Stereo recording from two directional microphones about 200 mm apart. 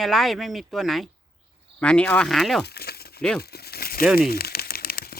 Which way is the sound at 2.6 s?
50° left (ahead or behind).